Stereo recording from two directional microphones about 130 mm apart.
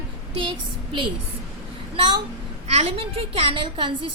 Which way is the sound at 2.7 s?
50° right (ahead or behind).